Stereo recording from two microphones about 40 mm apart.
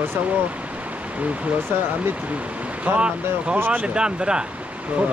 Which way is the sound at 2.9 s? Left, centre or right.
Right.